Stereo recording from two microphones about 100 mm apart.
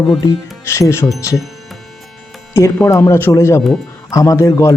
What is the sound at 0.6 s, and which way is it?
Speech, 30° left (ahead or behind).